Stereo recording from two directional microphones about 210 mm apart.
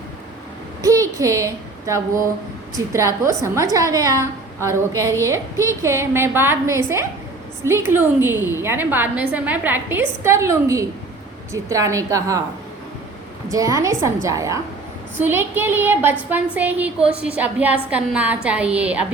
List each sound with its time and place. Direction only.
0.8 s a woman's voice: 15° right (ahead or behind)
13.5 s a woman's voice: 15° right (ahead or behind)